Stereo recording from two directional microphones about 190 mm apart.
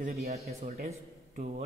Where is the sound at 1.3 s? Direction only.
40° right (ahead or behind).